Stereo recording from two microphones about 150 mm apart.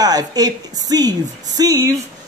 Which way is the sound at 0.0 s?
25° right (ahead or behind).